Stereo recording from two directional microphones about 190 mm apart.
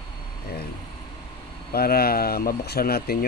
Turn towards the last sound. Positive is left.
turn(degrees=50)  # may be behind; listen again after turning